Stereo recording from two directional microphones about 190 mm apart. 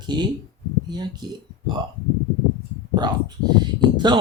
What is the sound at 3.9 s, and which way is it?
Speech, 25° right (ahead or behind).